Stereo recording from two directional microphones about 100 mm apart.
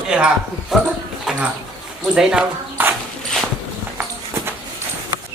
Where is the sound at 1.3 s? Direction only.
5° right (ahead or behind).